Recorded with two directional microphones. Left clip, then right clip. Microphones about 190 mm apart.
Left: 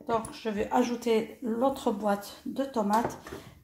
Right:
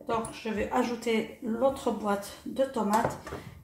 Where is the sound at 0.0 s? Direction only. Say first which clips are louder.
Left 1 dB; 45° left (ahead or behind).